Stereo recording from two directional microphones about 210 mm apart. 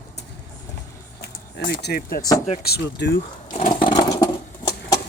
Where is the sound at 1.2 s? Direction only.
45° left (ahead or behind).